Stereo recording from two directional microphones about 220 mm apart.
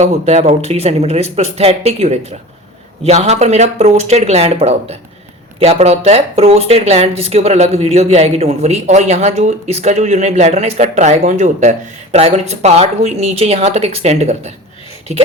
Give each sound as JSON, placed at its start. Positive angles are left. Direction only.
{"t": 0.0, "sound": "speech", "side_deg": -30}